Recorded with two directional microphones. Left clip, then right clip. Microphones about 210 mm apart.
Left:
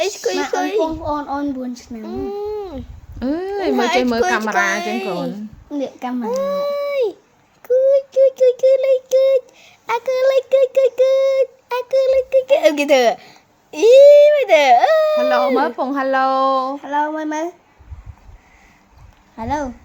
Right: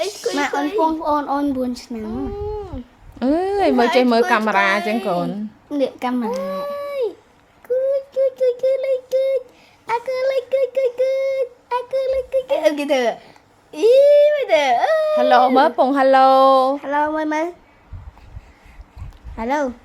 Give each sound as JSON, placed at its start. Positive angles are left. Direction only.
{"t": 0.5, "sound": "a sound", "side_deg": 40}
{"t": 0.9, "sound": "speech", "side_deg": -25}
{"t": 2.0, "sound": "speech", "side_deg": 35}
{"t": 3.2, "sound": "speech", "side_deg": -10}
{"t": 6.4, "sound": "a sound", "side_deg": 35}
{"t": 7.6, "sound": "child singing", "side_deg": 35}
{"t": 9.8, "sound": "speech", "side_deg": 35}
{"t": 15.2, "sound": "speech", "side_deg": -10}
{"t": 19.4, "sound": "speech", "side_deg": -15}